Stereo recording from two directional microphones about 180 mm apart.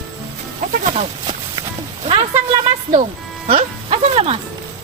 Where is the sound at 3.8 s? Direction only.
35° right (ahead or behind).